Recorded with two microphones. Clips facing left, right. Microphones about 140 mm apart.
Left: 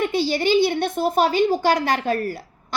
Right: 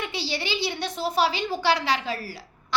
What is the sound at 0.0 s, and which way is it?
A woman's voice, 50° left (ahead or behind).